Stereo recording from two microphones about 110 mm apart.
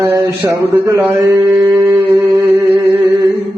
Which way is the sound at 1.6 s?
20° right (ahead or behind).